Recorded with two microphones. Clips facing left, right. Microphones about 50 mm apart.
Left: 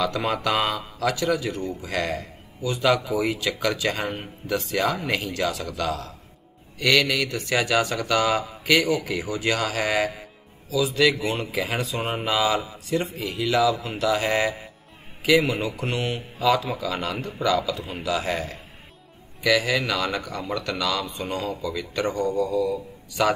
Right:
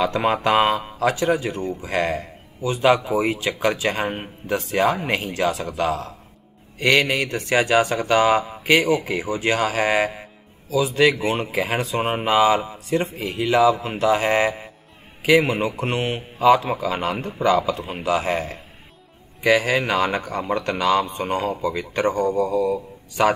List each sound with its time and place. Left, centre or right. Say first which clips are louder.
0.0 s speech: right 4 dB; right